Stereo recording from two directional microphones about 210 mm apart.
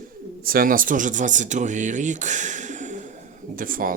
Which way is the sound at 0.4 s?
45° right (ahead or behind).